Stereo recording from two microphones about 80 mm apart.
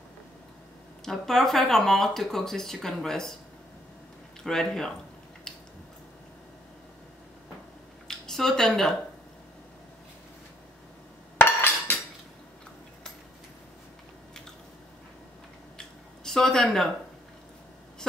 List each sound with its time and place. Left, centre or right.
1.0 s speech: centre
4.4 s speech: centre
8.1 s speech: centre
11.3 s a sound: left
16.3 s speech: centre